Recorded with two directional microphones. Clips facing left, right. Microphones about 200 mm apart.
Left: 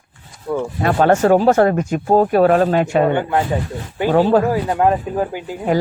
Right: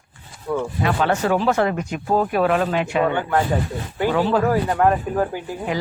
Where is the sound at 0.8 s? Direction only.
45° left (ahead or behind).